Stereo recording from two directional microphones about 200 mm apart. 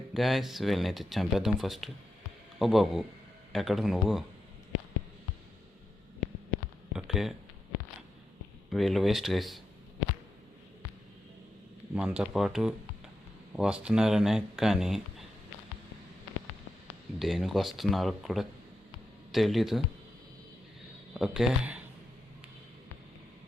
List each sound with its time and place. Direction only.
0.1 s speech: centre (ahead or behind)
6.9 s a sound: centre (ahead or behind)
8.7 s speech: centre (ahead or behind)
11.9 s speech: 5° right (ahead or behind)
17.2 s speech: centre (ahead or behind)
21.1 s speech: 5° right (ahead or behind)